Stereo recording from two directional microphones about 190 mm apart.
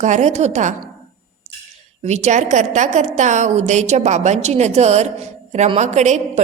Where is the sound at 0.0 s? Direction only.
40° right (ahead or behind).